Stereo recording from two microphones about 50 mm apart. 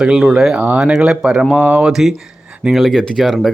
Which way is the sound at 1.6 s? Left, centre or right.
Right.